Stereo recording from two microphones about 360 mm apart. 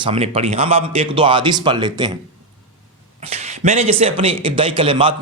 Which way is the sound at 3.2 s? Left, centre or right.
Centre.